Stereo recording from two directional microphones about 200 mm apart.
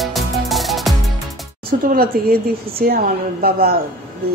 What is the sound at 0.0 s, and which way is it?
Music, centre (ahead or behind).